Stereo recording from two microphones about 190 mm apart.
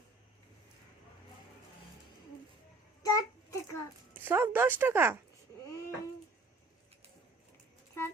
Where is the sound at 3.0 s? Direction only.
20° left (ahead or behind).